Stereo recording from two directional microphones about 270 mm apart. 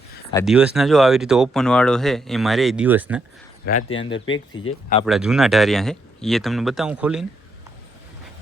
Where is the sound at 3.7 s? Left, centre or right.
Left.